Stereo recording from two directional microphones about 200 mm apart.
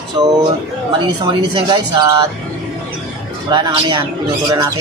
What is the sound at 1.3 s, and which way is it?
Speech, 20° right (ahead or behind).